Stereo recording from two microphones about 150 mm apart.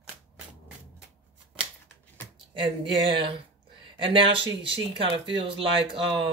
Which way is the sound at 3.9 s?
35° right (ahead or behind).